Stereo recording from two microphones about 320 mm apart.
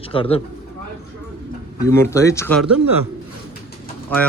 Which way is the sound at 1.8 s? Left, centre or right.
Centre.